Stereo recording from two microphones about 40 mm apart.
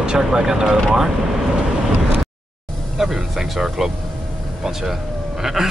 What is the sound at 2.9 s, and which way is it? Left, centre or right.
Speech, centre.